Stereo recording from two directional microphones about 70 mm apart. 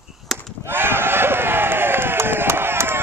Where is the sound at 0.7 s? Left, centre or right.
Right.